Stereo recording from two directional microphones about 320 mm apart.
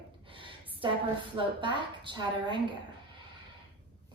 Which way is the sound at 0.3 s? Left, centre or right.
Centre.